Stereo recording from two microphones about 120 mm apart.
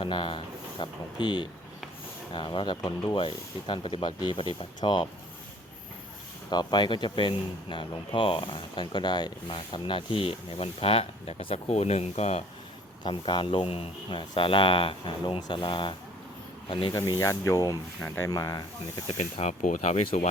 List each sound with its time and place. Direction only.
0.0 s speech: 40° left (ahead or behind)
6.5 s speech: 35° left (ahead or behind)
11.7 s speech: 60° left (ahead or behind)
13.0 s speech: 40° left (ahead or behind)
16.9 s speech: 30° left (ahead or behind)
19.0 s speech: 65° left (ahead or behind)